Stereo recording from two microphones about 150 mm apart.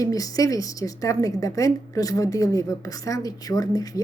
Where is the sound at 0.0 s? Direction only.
25° left (ahead or behind).